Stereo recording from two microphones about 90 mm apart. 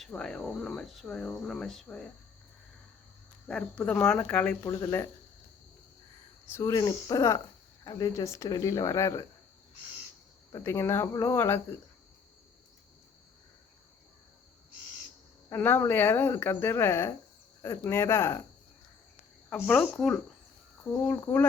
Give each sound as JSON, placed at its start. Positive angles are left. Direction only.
{"t": 0.1, "sound": "speech", "side_deg": 10}
{"t": 3.4, "sound": "speech", "side_deg": 10}
{"t": 4.6, "sound": "speech", "side_deg": 35}
{"t": 6.5, "sound": "speech", "side_deg": 35}
{"t": 7.9, "sound": "speech", "side_deg": 50}
{"t": 8.1, "sound": "speech", "side_deg": 35}
{"t": 10.5, "sound": "speech", "side_deg": 35}
{"t": 15.4, "sound": "speech", "side_deg": 25}
{"t": 19.9, "sound": "speech", "side_deg": 5}
{"t": 21.1, "sound": "speech", "side_deg": 25}